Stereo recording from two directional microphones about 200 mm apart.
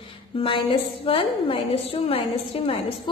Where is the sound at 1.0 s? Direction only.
30° left (ahead or behind).